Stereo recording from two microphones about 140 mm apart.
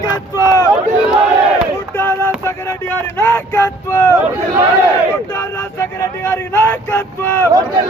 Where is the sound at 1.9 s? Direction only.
15° left (ahead or behind).